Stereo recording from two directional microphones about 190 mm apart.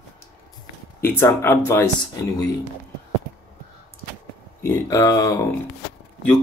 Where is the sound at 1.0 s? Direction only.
10° left (ahead or behind).